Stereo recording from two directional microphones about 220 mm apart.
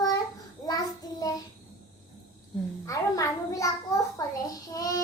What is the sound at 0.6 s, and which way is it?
Child singing, 15° left (ahead or behind).